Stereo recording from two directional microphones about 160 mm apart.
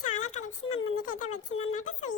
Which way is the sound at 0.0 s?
50° left (ahead or behind).